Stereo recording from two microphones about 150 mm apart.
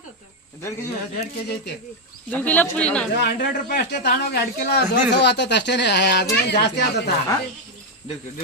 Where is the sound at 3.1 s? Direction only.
85° left.